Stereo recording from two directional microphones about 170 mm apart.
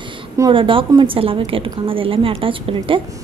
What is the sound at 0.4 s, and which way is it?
A woman's voice, 30° right (ahead or behind).